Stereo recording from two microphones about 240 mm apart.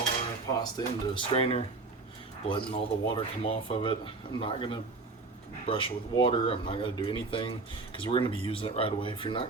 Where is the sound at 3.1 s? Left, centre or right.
Left.